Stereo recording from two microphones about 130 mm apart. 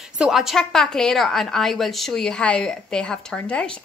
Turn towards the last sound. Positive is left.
turn(degrees=10)  # may be behind; listen again after turning